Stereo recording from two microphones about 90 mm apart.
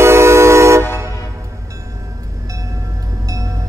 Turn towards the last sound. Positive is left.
turn(degrees=-40)  # may be behind; listen again after turning